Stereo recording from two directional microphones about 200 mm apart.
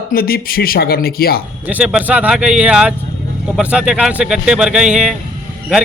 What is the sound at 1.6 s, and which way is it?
Speech, 5° right (ahead or behind).